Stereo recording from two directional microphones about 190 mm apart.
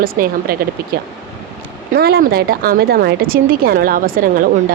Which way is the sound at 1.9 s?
55° right (ahead or behind).